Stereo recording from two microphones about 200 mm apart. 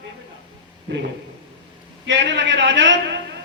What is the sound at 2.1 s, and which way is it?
Speech, 65° right (ahead or behind).